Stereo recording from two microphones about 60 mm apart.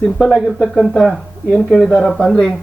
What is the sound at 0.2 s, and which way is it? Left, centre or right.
Speech, centre.